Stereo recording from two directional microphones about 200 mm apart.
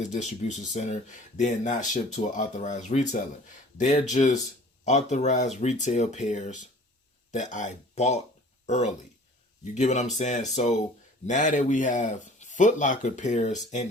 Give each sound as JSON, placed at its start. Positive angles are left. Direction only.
{"t": 0.0, "sound": "speech", "side_deg": 35}